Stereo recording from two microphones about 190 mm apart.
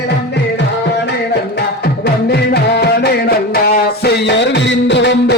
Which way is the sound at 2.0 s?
55° left (ahead or behind).